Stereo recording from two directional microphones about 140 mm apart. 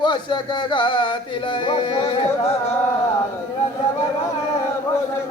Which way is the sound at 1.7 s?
40° left (ahead or behind).